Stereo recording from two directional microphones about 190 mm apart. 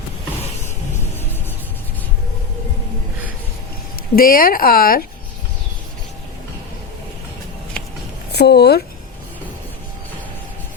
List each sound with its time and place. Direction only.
4.1 s speech: 50° left (ahead or behind)
8.3 s speech: 60° left (ahead or behind)